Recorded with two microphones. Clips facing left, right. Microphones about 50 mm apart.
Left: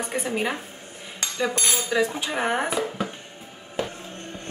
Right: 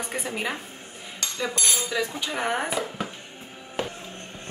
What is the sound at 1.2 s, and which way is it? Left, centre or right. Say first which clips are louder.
Speech: left 3 dB; left.